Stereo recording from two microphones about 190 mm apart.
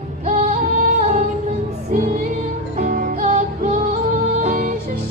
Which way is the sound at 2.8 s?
50° right (ahead or behind).